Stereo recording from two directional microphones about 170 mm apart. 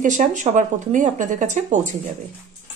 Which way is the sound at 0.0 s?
45° right (ahead or behind).